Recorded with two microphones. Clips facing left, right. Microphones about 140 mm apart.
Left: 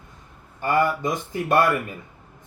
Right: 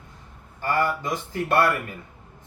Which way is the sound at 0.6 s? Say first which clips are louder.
Left 3 dB; 20° left (ahead or behind).